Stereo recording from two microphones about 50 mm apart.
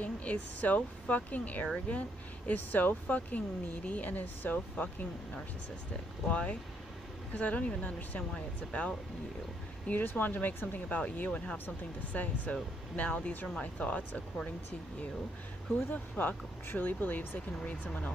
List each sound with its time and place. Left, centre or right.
0.0 s speech: left
6.2 s speech: left
9.8 s speech: left
11.5 s speech: left
15.7 s speech: left